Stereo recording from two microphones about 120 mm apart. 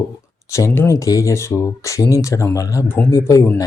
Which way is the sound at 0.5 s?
20° left (ahead or behind).